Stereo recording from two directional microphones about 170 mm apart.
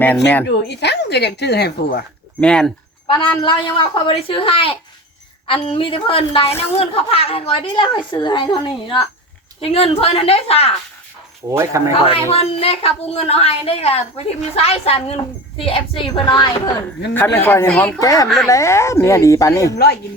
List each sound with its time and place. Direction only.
0.4 s speech: 90° left
2.4 s speech: 5° left (ahead or behind)
3.1 s a woman's voice: 30° left (ahead or behind)
11.5 s speech: 15° right (ahead or behind)
12.0 s a woman's voice: 35° left (ahead or behind)
17.2 s speech: 10° left (ahead or behind)
18.0 s speech: 20° left (ahead or behind)